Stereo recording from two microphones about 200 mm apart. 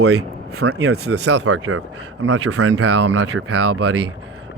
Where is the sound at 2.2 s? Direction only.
70° right (ahead or behind).